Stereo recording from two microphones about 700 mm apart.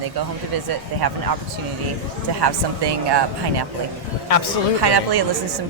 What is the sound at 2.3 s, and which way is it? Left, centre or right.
Speech, right.